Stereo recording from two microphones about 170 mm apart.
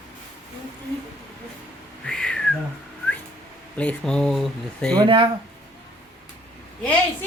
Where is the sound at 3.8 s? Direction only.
5° left (ahead or behind).